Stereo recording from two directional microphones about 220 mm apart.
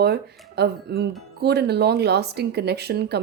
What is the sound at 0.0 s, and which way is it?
Speech, 50° right (ahead or behind).